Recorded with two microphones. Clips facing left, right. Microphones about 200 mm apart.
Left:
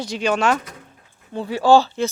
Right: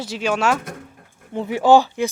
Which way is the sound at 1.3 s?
20° right (ahead or behind).